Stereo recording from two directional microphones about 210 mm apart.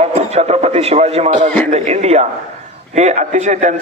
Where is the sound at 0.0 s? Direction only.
30° right (ahead or behind).